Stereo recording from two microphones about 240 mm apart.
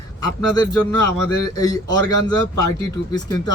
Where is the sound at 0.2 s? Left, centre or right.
Centre.